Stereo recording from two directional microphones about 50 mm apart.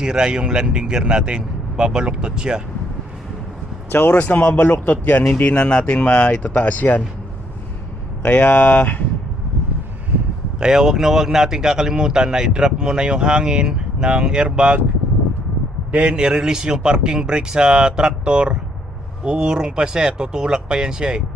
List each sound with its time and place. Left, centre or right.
0.0 s speech: centre
3.9 s speech: left
5.4 s speech: left
8.2 s speech: left
10.6 s speech: centre
15.9 s speech: right